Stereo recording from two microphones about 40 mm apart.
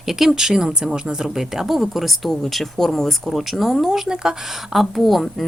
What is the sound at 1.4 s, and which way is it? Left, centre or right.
Speech, centre.